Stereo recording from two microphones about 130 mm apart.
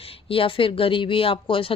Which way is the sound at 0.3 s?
45° left (ahead or behind).